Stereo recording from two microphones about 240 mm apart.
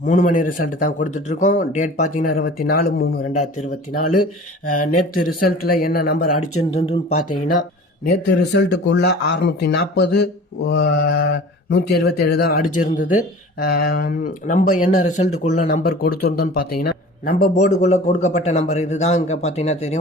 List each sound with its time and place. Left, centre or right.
0.0 s a man's voice: left
4.7 s a man's voice: left
6.2 s speech: left
6.7 s speech: left
7.2 s speech: left
8.5 s a man's voice: left